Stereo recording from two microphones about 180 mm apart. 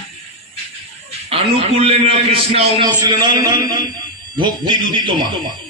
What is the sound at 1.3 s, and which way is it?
A man's voice, 30° right (ahead or behind).